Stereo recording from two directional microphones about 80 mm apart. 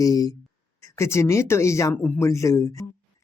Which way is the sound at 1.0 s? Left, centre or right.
Left.